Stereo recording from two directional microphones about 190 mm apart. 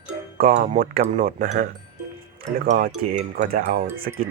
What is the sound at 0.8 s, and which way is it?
Speech, 45° right (ahead or behind).